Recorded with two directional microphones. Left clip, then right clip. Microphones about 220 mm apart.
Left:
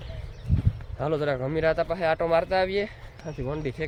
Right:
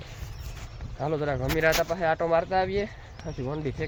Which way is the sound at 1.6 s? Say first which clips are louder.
Right 1 dB; 5° left (ahead or behind).